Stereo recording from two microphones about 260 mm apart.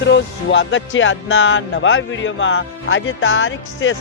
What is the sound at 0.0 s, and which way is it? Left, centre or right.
Speech, left.